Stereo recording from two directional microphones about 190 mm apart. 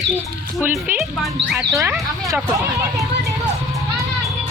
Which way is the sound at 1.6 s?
15° right (ahead or behind).